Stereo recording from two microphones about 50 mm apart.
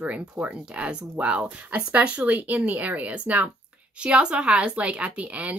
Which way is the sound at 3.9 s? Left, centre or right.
Right.